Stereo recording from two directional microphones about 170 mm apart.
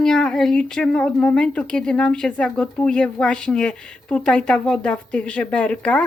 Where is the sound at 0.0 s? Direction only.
5° left (ahead or behind).